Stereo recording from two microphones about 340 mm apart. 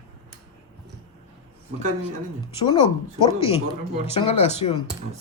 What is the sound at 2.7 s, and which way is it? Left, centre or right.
Speech, centre.